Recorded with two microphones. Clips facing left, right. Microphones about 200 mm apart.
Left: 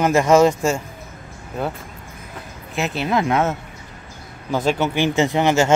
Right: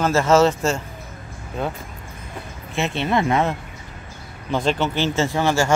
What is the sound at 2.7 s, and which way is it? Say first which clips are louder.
Speech: even; centre (ahead or behind).